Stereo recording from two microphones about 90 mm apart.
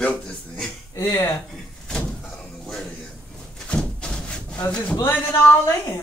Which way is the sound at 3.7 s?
10° left (ahead or behind).